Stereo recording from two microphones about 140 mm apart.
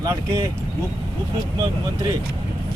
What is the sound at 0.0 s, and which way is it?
Speech, 25° right (ahead or behind).